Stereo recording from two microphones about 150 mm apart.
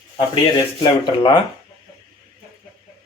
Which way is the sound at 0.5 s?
30° left (ahead or behind).